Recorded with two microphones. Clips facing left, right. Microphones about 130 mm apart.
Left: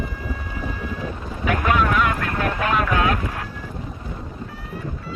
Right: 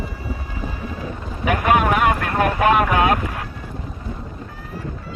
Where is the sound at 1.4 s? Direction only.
70° right (ahead or behind).